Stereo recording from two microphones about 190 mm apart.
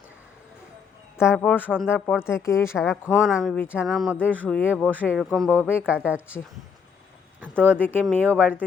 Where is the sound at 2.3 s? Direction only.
15° left (ahead or behind).